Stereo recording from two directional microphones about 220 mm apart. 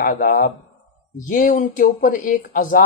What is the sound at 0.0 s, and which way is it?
Speech, 40° left (ahead or behind).